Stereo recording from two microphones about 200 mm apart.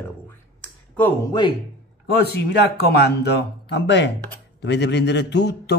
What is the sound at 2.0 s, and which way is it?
A man's voice, 55° left (ahead or behind).